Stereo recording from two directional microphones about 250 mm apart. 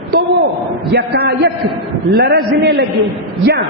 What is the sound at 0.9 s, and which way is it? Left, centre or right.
A man's voice, right.